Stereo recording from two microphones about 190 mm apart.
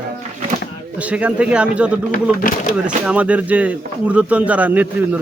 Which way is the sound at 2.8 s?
5° right (ahead or behind).